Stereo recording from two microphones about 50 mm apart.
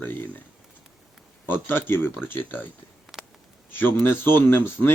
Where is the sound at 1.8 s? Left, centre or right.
Left.